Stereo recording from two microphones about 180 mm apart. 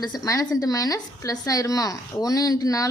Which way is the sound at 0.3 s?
20° left (ahead or behind).